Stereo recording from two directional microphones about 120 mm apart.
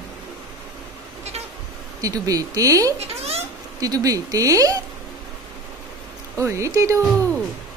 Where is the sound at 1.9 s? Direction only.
30° right (ahead or behind).